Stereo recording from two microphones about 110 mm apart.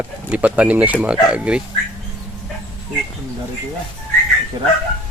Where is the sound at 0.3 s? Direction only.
15° right (ahead or behind).